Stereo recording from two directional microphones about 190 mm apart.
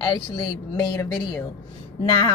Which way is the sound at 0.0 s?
25° left (ahead or behind).